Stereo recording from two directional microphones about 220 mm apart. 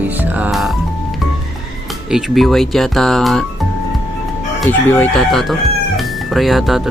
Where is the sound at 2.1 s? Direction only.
Centre (ahead or behind).